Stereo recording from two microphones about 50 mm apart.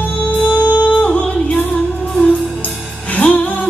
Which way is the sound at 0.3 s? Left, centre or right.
Left.